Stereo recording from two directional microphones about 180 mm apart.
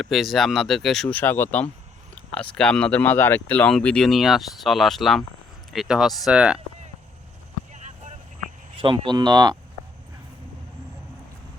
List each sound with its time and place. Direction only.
0.0 s speech: centre (ahead or behind)
7.7 s vehicle: 45° right (ahead or behind)
8.8 s speech: 25° right (ahead or behind)